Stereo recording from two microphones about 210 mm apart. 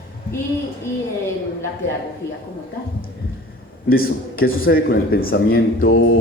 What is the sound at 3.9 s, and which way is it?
Speech, 45° left (ahead or behind).